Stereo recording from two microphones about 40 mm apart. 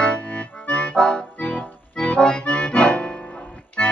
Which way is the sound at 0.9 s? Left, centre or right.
Left.